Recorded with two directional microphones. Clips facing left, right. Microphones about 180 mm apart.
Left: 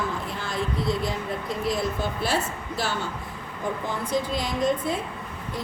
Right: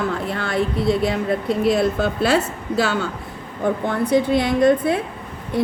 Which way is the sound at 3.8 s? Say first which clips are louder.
Right 9 dB; 65° right (ahead or behind).